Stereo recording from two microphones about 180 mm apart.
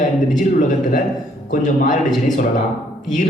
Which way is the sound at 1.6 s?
45° left (ahead or behind).